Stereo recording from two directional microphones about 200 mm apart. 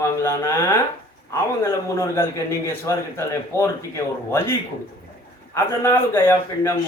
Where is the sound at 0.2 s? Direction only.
15° left (ahead or behind).